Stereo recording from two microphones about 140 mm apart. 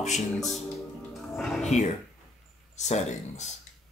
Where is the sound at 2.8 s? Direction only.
55° left (ahead or behind).